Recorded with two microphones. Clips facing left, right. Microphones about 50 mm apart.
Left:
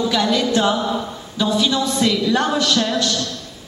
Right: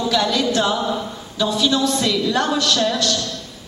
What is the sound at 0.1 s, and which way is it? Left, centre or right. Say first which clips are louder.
A woman's voice: left 1 dB; left.